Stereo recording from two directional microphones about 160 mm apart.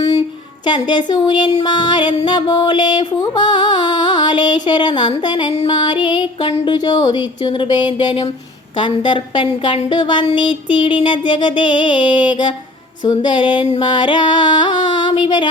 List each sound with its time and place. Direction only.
0.6 s music: 25° left (ahead or behind)